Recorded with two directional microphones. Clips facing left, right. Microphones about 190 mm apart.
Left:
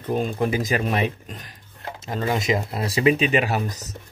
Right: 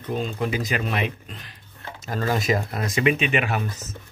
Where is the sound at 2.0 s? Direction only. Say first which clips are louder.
Even; 20° left (ahead or behind); by 3.9 s 35° left (ahead or behind).